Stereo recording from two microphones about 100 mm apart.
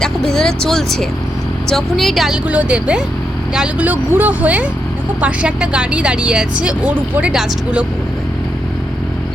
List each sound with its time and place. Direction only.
0.0 s speech: 5° left (ahead or behind)
2.5 s speech: 10° right (ahead or behind)